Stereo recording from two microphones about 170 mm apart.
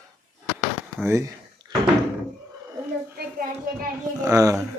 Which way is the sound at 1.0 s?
15° right (ahead or behind).